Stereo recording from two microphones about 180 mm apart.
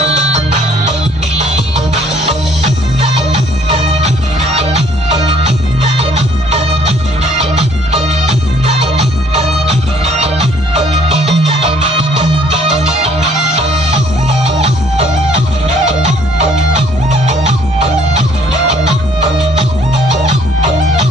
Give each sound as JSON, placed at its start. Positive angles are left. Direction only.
{"t": 0.0, "sound": "music", "side_deg": -35}
{"t": 3.0, "sound": "music", "side_deg": -35}
{"t": 5.9, "sound": "music", "side_deg": -35}
{"t": 14.4, "sound": "music", "side_deg": -35}
{"t": 16.1, "sound": "music", "side_deg": -40}
{"t": 20.2, "sound": "music", "side_deg": -40}